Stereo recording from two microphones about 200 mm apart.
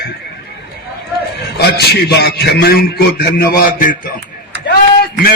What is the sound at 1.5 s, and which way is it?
A man's voice, 55° left (ahead or behind).